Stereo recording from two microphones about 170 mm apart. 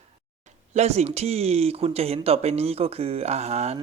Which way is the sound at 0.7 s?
40° right (ahead or behind).